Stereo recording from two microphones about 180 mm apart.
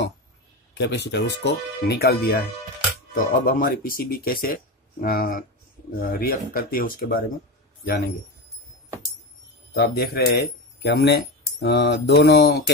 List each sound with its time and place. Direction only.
0.7 s speech: 70° left (ahead or behind)
3.2 s speech: 50° left (ahead or behind)
9.8 s speech: 60° left (ahead or behind)